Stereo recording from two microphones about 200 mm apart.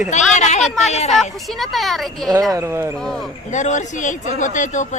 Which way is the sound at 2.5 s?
15° right (ahead or behind).